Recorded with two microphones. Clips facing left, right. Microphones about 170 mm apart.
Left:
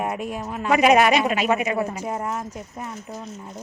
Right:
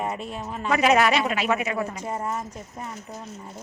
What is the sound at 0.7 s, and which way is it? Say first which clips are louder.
Speech: left 3 dB; 15° left (ahead or behind).